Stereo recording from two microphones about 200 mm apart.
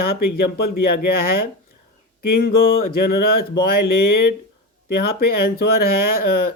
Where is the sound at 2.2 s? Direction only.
50° left (ahead or behind).